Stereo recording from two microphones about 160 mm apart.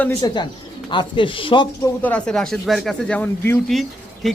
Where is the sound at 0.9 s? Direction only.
30° left (ahead or behind).